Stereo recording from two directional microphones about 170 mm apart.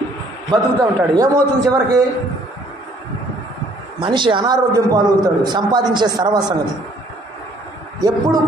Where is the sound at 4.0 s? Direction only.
30° right (ahead or behind).